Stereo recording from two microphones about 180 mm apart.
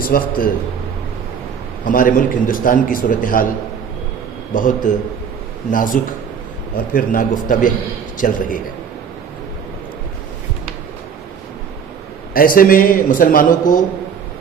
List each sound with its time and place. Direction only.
0.0 s a man's voice: 55° left (ahead or behind)
1.8 s a man's voice: 50° left (ahead or behind)
4.5 s a man's voice: 45° left (ahead or behind)
12.3 s a man's voice: 55° left (ahead or behind)